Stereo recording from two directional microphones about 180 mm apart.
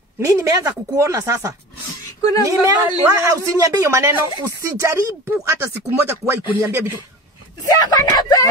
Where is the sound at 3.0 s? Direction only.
15° right (ahead or behind).